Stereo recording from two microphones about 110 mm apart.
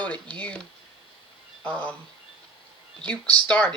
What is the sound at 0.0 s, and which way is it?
Speech, 15° left (ahead or behind).